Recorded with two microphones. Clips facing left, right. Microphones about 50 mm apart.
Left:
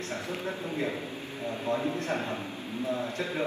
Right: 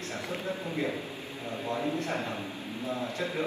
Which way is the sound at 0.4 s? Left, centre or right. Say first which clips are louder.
Right 1 dB; left.